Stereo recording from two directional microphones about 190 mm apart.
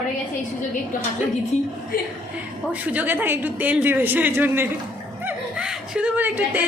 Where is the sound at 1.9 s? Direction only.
50° left (ahead or behind).